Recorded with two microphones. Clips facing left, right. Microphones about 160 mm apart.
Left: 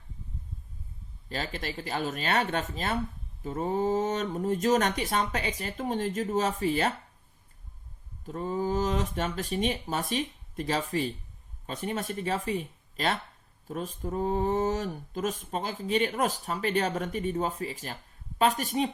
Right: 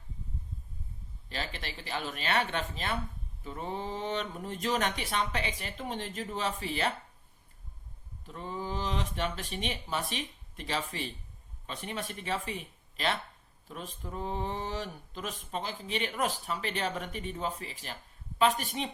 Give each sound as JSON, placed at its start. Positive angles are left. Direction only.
{"t": 1.3, "sound": "speech", "side_deg": 40}
{"t": 8.3, "sound": "speech", "side_deg": 40}